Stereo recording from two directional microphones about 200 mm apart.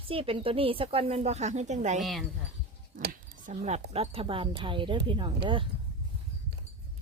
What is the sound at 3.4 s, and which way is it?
Speech, 35° right (ahead or behind).